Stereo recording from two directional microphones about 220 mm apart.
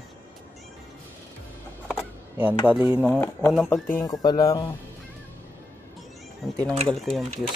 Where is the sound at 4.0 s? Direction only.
15° left (ahead or behind).